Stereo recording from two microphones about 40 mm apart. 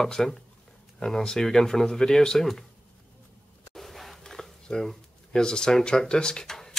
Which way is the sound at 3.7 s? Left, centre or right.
Centre.